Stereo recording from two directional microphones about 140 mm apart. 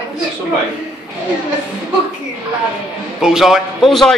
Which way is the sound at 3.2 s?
5° right (ahead or behind).